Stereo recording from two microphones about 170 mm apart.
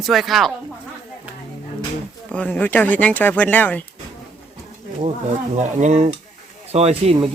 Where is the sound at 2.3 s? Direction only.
10° left (ahead or behind).